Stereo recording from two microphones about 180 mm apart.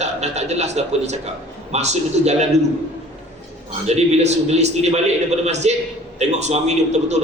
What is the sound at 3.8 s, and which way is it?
A man's voice, 35° right (ahead or behind).